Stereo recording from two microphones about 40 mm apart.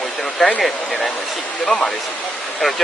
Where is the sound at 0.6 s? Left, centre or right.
Centre.